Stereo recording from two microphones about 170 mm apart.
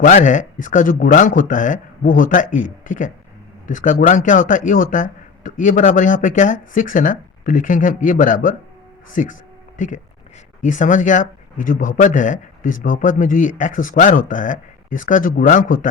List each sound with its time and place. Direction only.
0.0 s speech: 50° left (ahead or behind)